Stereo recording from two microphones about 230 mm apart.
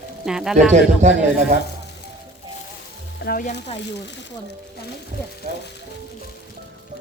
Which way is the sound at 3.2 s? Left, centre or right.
Left.